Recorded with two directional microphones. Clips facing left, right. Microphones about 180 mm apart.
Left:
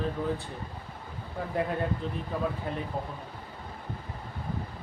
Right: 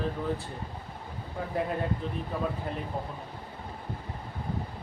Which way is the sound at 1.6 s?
Centre (ahead or behind).